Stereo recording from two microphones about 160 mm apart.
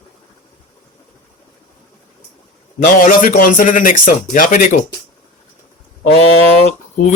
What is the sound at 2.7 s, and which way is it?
A man's voice, 55° left (ahead or behind).